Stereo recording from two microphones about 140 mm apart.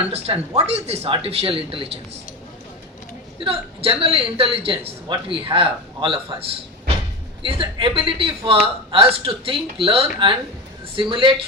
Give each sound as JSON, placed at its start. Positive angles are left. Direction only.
{"t": 0.1, "sound": "speech", "side_deg": -45}
{"t": 3.4, "sound": "a woman's voice", "side_deg": -40}